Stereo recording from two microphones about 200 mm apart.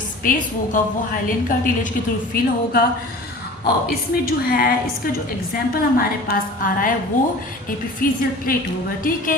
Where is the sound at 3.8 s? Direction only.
50° left (ahead or behind).